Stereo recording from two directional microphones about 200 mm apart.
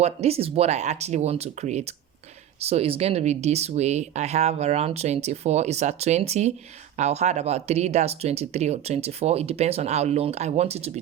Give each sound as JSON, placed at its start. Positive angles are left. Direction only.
{"t": 0.0, "sound": "speech", "side_deg": -30}